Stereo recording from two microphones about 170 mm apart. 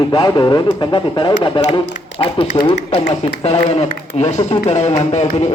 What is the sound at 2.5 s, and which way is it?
Speech, 30° left (ahead or behind).